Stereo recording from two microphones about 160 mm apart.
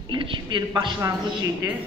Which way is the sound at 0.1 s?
30° right (ahead or behind).